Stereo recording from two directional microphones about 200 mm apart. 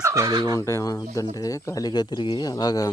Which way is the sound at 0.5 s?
15° left (ahead or behind).